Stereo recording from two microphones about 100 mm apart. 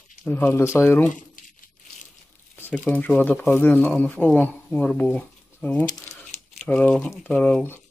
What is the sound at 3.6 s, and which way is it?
Speech, 15° left (ahead or behind).